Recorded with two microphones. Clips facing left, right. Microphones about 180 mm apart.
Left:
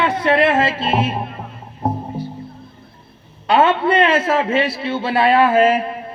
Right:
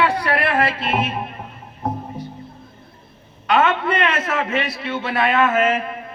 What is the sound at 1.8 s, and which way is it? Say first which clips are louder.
Music: left 4 dB; 30° left (ahead or behind).